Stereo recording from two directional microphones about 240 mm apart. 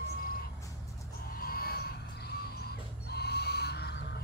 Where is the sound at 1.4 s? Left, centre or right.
Left.